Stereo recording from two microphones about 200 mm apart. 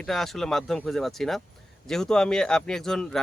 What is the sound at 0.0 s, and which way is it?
Speech, centre (ahead or behind).